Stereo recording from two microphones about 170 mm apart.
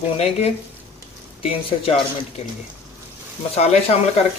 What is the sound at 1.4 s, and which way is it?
Speech, 35° left (ahead or behind).